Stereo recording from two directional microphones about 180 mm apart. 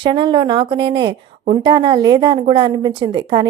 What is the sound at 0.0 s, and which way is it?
A woman's voice, 25° right (ahead or behind).